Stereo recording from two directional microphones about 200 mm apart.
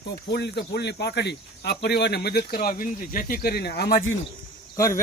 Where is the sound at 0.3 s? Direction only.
55° left (ahead or behind).